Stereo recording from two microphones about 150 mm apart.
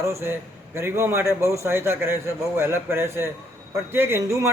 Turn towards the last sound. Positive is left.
turn(degrees=-20)  # may be behind; listen again after turning